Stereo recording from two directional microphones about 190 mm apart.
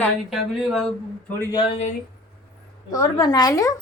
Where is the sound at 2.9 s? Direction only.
20° left (ahead or behind).